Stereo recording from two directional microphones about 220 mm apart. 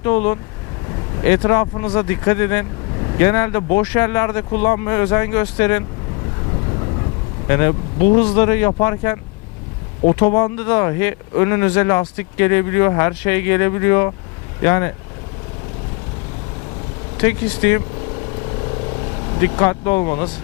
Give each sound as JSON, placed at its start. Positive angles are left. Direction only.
{"t": 0.0, "sound": "speech", "side_deg": 15}
{"t": 7.4, "sound": "speech", "side_deg": 15}
{"t": 7.9, "sound": "a man's voice", "side_deg": 25}
{"t": 8.4, "sound": "speech", "side_deg": 10}
{"t": 17.2, "sound": "speech", "side_deg": 10}
{"t": 19.4, "sound": "speech", "side_deg": 10}